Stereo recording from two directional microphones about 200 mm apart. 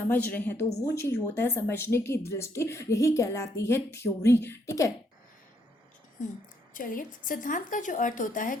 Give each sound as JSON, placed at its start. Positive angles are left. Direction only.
{"t": 0.1, "sound": "speech", "side_deg": 10}
{"t": 6.7, "sound": "a woman's voice", "side_deg": 45}